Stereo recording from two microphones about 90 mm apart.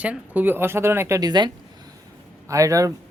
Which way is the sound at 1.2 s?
50° right (ahead or behind).